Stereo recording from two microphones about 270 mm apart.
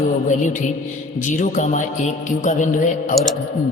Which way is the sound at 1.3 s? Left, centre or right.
Left.